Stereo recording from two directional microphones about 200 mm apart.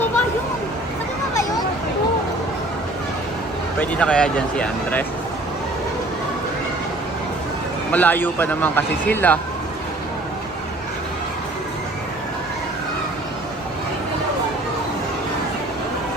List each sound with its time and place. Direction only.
3.8 s speech: 5° left (ahead or behind)
7.9 s speech: 10° left (ahead or behind)